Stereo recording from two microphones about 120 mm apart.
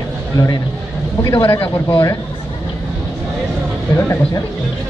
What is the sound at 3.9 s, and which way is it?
Speech, 20° left (ahead or behind).